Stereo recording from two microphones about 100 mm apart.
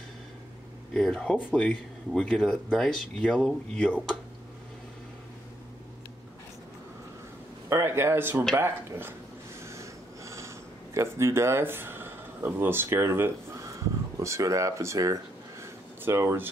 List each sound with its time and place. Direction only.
0.9 s speech: 5° left (ahead or behind)
7.7 s speech: 25° right (ahead or behind)
9.6 s snort: 30° right (ahead or behind)
11.0 s speech: 30° right (ahead or behind)
15.6 s a sound: 25° right (ahead or behind)